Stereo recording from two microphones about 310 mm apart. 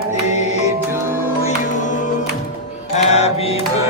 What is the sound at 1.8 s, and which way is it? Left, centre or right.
Music, left.